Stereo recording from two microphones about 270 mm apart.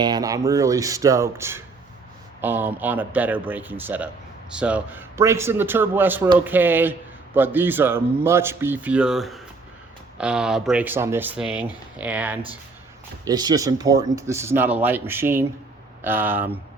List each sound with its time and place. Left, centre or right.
0.0 s a man's voice: centre